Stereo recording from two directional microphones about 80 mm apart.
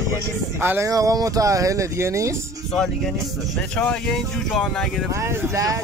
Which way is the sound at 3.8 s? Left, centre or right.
Centre.